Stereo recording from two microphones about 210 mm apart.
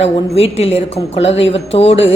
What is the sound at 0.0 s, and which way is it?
A woman's voice, 30° left (ahead or behind).